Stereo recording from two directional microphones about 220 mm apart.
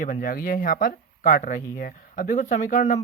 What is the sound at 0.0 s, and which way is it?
Speech, 40° left (ahead or behind).